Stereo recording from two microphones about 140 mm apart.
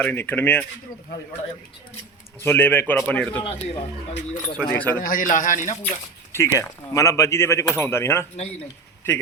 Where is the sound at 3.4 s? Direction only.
35° left (ahead or behind).